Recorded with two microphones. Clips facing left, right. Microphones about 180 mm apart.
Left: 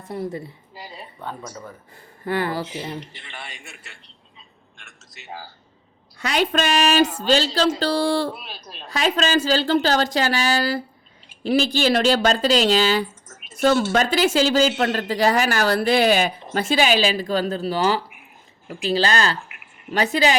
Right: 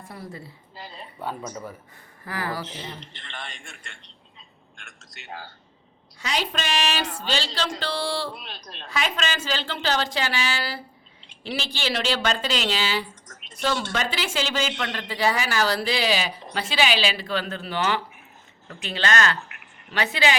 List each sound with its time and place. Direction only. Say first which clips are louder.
0.1 s a woman's voice: left 12 dB; 25° left (ahead or behind)
1.2 s speech: right 2 dB; 10° right (ahead or behind)
2.2 s a woman's voice: left 7 dB; 30° left (ahead or behind)
2.6 s a man's voice: left 7 dB; 10° left (ahead or behind)
6.1 s a woman's voice: left 7 dB; 55° left (ahead or behind)
8.3 s a man's voice: left 4 dB; 5° left (ahead or behind)
8.9 s a woman's voice: left 7 dB; 35° left (ahead or behind)
13.2 s a sound: left 2 dB; 5° left (ahead or behind)
13.6 s a woman's voice: left 8 dB; 45° left (ahead or behind)
19.4 s a sound: left 1 dB; 10° left (ahead or behind)
19.9 s a woman's voice: left 5 dB; 40° left (ahead or behind)